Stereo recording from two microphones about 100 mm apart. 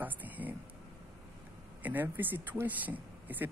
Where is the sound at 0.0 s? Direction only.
15° right (ahead or behind).